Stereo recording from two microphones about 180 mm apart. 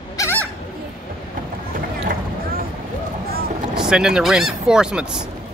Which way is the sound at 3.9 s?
5° right (ahead or behind).